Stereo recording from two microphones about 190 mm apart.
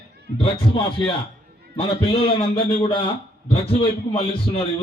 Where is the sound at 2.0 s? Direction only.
30° left (ahead or behind).